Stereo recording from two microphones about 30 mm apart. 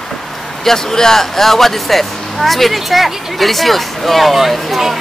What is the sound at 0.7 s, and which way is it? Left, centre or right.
Speech, centre.